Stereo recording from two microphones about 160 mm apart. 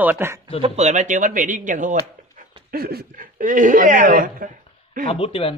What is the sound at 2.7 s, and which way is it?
A man's voice, 75° right (ahead or behind).